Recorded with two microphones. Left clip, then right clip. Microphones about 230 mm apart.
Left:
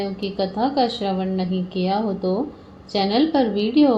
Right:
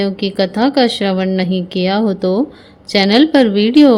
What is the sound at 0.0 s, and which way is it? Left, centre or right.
A woman's voice, right.